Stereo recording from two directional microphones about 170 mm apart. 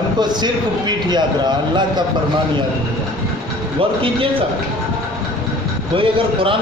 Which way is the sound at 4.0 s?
30° right (ahead or behind).